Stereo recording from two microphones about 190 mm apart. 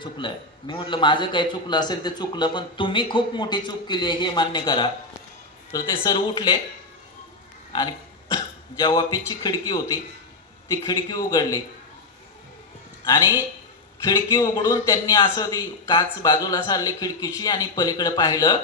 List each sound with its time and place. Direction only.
0.0 s a man's voice: 25° left (ahead or behind)
7.7 s a man's voice: 20° left (ahead or behind)
13.1 s a man's voice: 15° left (ahead or behind)